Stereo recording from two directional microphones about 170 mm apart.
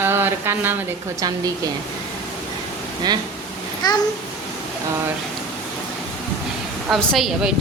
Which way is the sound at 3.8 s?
25° left (ahead or behind).